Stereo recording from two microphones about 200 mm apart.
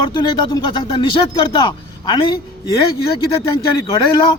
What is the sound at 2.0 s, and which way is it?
Speech, 20° left (ahead or behind).